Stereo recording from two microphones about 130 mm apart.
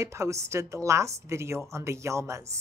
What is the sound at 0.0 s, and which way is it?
Speech, 25° right (ahead or behind).